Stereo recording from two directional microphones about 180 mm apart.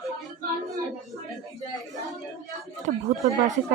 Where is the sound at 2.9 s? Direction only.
45° right (ahead or behind).